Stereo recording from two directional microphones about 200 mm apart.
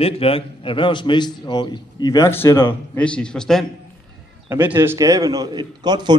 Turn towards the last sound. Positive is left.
turn(degrees=-20)  # may be behind; listen again after turning